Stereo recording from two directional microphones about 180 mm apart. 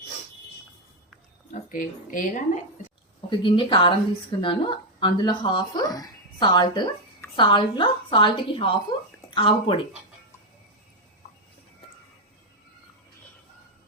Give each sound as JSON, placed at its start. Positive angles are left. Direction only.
{"t": 1.7, "sound": "speech", "side_deg": 45}
{"t": 3.2, "sound": "speech", "side_deg": 25}